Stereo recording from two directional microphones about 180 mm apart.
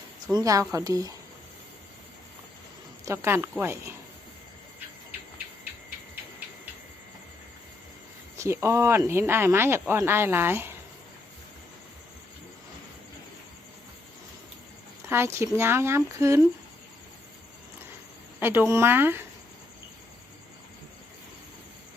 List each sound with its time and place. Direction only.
0.3 s speech: 20° right (ahead or behind)
3.1 s speech: 15° right (ahead or behind)
8.4 s speech: 15° right (ahead or behind)
15.0 s speech: 15° right (ahead or behind)
18.3 s speech: 10° right (ahead or behind)